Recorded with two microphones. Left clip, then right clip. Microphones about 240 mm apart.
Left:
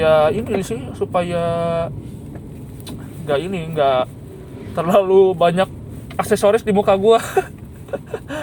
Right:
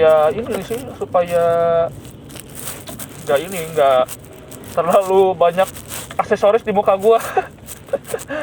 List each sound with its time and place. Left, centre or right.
0.0 s a sound: left
0.9 s speech: left
3.2 s speech: left